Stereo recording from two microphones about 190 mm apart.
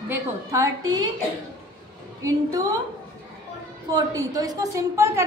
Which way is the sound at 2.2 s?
15° right (ahead or behind).